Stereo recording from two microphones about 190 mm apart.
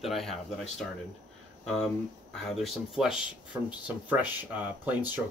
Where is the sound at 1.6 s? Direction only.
5° left (ahead or behind).